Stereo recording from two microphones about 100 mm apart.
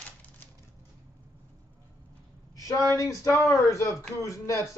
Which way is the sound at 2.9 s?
30° left (ahead or behind).